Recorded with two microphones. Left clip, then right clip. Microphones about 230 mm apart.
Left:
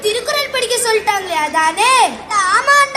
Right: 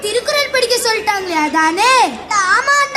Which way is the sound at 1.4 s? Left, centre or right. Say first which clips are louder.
Right 2 dB; left.